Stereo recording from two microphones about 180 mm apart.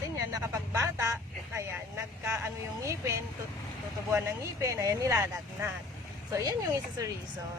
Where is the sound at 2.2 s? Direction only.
15° right (ahead or behind).